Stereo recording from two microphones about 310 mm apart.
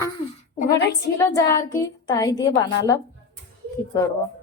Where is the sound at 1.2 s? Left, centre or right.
Centre.